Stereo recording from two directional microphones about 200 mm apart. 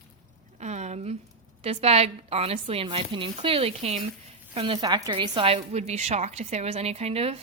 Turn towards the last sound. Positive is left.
turn(degrees=-30)  # may be behind; listen again after turning